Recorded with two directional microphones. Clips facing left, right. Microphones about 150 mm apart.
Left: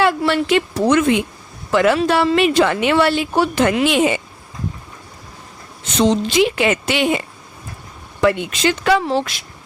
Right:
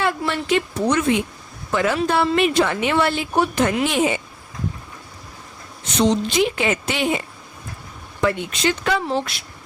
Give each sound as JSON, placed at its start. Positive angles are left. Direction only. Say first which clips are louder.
{"t": 0.0, "sound": "a woman's voice", "louder": "left 6 dB", "side_deg": 85}
{"t": 6.0, "sound": "a woman's voice", "louder": "left 3 dB", "side_deg": 85}
{"t": 8.2, "sound": "a woman's voice", "louder": "left 4 dB", "side_deg": 85}